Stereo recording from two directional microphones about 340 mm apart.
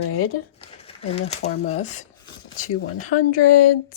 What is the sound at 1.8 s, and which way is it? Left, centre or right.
Speech, left.